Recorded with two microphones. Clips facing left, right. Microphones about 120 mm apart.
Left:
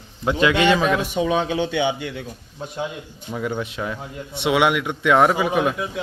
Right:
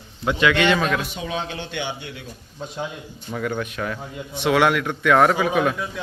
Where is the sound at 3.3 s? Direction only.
15° left (ahead or behind).